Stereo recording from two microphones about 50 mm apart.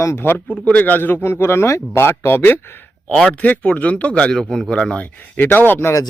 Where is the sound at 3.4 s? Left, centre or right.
Left.